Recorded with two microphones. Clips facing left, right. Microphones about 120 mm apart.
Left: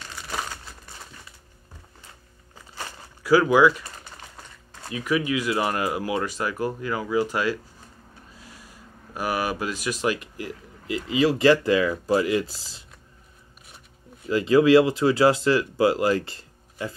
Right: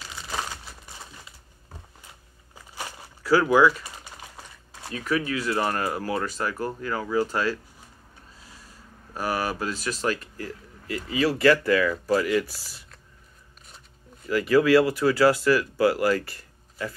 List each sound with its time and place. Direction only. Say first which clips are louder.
0.0 s crumpling: even; centre (ahead or behind)
3.3 s speech: left 2 dB; 15° left (ahead or behind)
3.8 s typing: even; 10° right (ahead or behind)
4.9 s speech: left 2 dB; 15° left (ahead or behind)
8.5 s speech: left 2 dB; 10° left (ahead or behind)
14.3 s speech: left 2 dB; 20° left (ahead or behind)